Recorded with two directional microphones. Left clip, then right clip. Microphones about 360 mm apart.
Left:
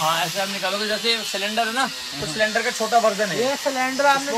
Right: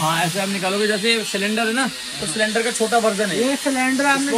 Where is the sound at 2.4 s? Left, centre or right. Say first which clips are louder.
Right 1 dB; left.